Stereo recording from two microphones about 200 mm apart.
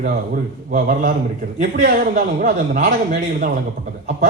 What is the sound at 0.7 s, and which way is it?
Speech, 45° right (ahead or behind).